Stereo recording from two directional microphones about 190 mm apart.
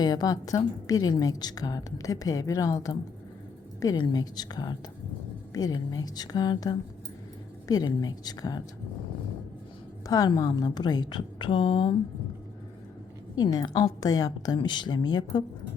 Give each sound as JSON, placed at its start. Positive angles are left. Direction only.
{"t": 0.0, "sound": "a woman's voice", "side_deg": 20}
{"t": 10.1, "sound": "a woman's voice", "side_deg": 20}
{"t": 13.4, "sound": "a woman's voice", "side_deg": 25}